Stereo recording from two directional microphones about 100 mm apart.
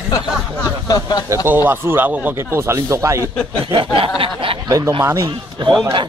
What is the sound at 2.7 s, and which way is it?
Speech, 30° right (ahead or behind).